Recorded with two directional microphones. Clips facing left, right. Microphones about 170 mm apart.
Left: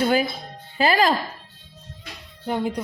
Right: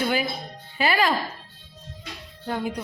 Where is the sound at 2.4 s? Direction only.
20° left (ahead or behind).